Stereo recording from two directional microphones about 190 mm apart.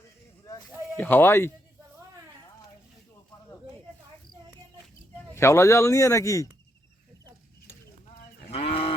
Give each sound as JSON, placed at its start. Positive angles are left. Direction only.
{"t": 0.9, "sound": "speech", "side_deg": 10}
{"t": 5.3, "sound": "speech", "side_deg": 15}
{"t": 8.4, "sound": "sheep", "side_deg": 30}